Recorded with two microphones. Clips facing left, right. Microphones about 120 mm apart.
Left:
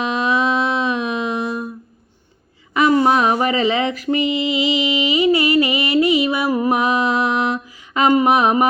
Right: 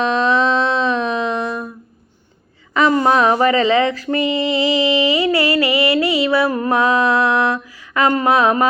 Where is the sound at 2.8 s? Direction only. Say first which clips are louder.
Even; 10° left (ahead or behind).